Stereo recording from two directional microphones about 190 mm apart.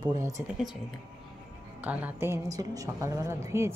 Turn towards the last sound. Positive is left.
turn(degrees=-15)  # may be behind; listen again after turning